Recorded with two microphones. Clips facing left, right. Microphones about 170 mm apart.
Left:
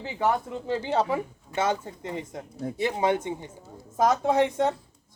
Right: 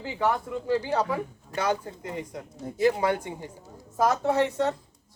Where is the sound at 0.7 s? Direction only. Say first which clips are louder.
Even; 25° left (ahead or behind).